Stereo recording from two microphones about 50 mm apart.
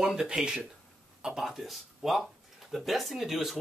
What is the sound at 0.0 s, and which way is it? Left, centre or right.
Speech, centre.